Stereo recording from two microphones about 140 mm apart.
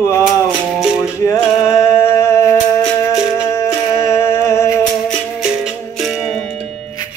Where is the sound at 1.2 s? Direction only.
20° left (ahead or behind).